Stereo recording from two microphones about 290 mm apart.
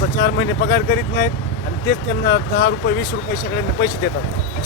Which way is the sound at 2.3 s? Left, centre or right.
Left.